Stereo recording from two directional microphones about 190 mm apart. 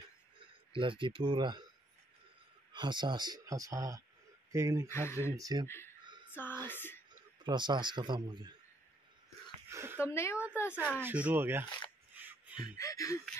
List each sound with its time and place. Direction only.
0.7 s speech: 25° right (ahead or behind)
2.7 s speech: 25° right (ahead or behind)
4.8 s speech: 15° left (ahead or behind)
5.3 s speech: 20° right (ahead or behind)
6.3 s a sound: 10° left (ahead or behind)
6.7 s speech: 10° left (ahead or behind)
7.4 s speech: 25° right (ahead or behind)
9.7 s speech: 15° right (ahead or behind)
10.0 s speech: 15° left (ahead or behind)
10.7 s speech: 10° right (ahead or behind)
12.1 s a sound: 10° right (ahead or behind)
12.7 s speech: 15° left (ahead or behind)